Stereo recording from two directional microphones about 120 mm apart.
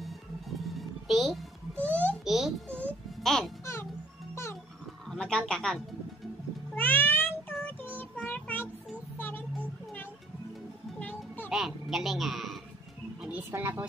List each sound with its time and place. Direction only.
0.0 s music: centre (ahead or behind)
1.8 s babbling: 15° left (ahead or behind)
2.2 s a sound: 5° right (ahead or behind)
3.3 s music: 5° left (ahead or behind)
5.1 s speech: 5° left (ahead or behind)
6.7 s meow: 15° left (ahead or behind)
11.0 s music: 15° left (ahead or behind)
11.4 s a sound: 5° right (ahead or behind)
13.2 s a sound: 15° right (ahead or behind)